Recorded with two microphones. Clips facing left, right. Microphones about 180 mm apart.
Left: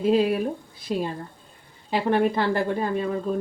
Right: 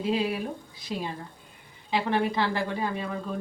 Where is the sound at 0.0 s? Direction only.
50° left (ahead or behind).